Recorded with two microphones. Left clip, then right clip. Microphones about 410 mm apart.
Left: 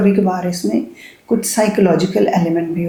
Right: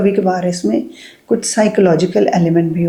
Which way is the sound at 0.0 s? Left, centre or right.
Right.